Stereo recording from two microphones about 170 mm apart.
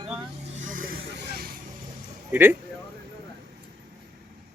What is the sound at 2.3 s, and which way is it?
Speech, 10° right (ahead or behind).